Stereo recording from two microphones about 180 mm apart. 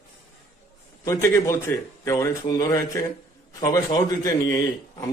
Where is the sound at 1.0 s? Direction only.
15° left (ahead or behind).